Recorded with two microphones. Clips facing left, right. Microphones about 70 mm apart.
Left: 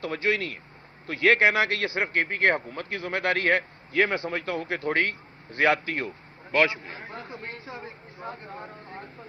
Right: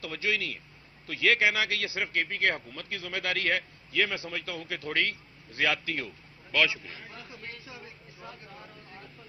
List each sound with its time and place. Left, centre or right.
0.0 s a man's voice: left